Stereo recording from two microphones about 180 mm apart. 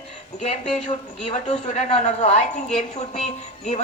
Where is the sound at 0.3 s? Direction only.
40° left (ahead or behind).